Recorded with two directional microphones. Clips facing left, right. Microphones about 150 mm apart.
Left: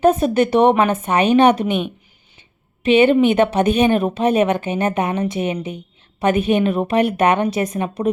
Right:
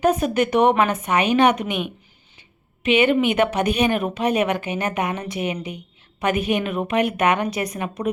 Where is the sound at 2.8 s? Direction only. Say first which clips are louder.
Left 5 dB; 30° left (ahead or behind).